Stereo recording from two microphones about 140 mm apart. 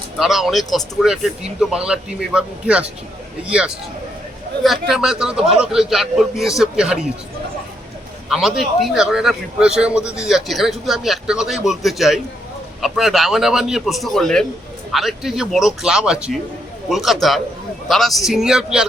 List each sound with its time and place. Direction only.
0.2 s a man's voice: centre (ahead or behind)
4.6 s a man's voice: centre (ahead or behind)
8.3 s a man's voice: centre (ahead or behind)